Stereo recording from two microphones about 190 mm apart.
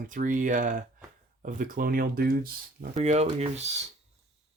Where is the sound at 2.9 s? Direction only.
35° right (ahead or behind).